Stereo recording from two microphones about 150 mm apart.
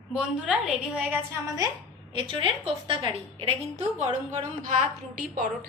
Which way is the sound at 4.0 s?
55° right (ahead or behind).